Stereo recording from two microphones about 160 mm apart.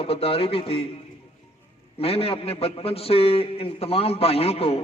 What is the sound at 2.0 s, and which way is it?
A man's voice, 35° left (ahead or behind).